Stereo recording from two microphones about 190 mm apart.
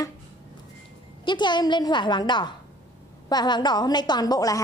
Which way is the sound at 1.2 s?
25° left (ahead or behind).